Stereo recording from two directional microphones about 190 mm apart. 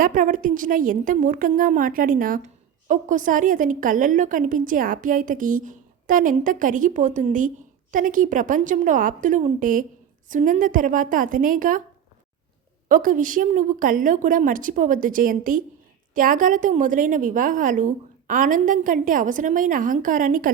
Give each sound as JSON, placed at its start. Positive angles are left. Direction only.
{"t": 0.0, "sound": "a woman's voice", "side_deg": -45}
{"t": 12.9, "sound": "a woman's voice", "side_deg": -45}